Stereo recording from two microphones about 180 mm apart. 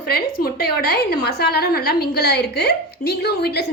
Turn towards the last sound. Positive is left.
turn(degrees=65)  # may be behind; listen again after turning